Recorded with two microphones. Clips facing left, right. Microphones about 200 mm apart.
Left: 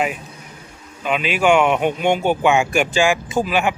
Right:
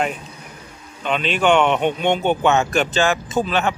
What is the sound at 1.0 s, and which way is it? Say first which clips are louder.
Speech: left 1 dB; 5° left (ahead or behind).